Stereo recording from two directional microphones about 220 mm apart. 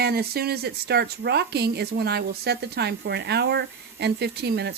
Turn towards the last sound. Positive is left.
turn(degrees=-50)  # may be behind; listen again after turning